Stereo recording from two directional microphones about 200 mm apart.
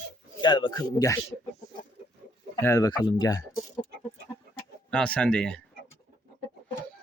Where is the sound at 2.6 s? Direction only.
15° left (ahead or behind).